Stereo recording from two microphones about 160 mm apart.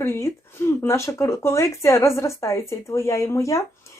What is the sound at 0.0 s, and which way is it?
Speech, 15° left (ahead or behind).